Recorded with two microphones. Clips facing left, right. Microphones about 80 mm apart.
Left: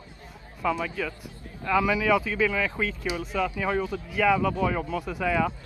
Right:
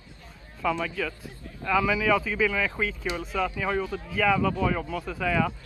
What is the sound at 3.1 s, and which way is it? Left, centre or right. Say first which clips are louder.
Speech: left 1 dB; centre.